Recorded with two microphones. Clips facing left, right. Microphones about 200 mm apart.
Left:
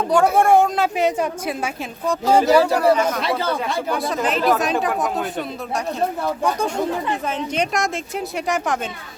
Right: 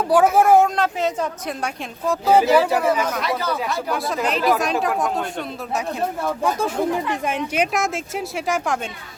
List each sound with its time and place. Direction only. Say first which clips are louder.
0.3 s speech: even; centre (ahead or behind)
0.9 s a woman's voice: left 3 dB; 15° left (ahead or behind)
2.2 s speech: left 1 dB; 5° right (ahead or behind)
3.2 s speech: left 2 dB; 30° left (ahead or behind)
3.8 s speech: left 1 dB; centre (ahead or behind)